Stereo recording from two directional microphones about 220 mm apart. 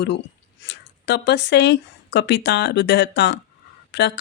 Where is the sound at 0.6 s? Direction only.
55° left (ahead or behind).